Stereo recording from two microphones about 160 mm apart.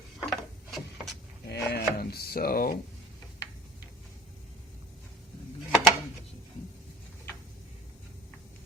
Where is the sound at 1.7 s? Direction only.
80° left.